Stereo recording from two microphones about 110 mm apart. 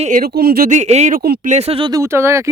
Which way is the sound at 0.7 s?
90° right.